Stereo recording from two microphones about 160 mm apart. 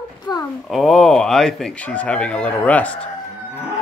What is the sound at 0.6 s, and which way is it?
Speech, centre (ahead or behind).